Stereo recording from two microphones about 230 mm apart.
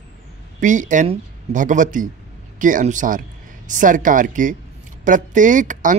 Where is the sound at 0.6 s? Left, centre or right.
Right.